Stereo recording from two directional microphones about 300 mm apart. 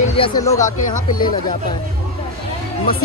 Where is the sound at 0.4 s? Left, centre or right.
Centre.